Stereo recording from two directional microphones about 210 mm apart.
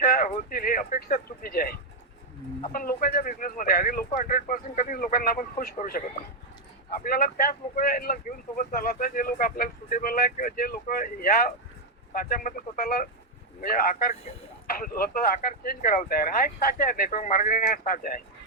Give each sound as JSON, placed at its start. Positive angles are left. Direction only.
{"t": 0.0, "sound": "speech", "side_deg": 45}
{"t": 2.7, "sound": "speech", "side_deg": 40}
{"t": 7.0, "sound": "speech", "side_deg": 45}